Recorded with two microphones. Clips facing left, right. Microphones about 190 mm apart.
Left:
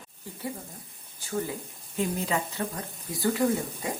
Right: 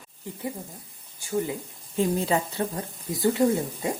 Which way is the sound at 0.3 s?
20° right (ahead or behind).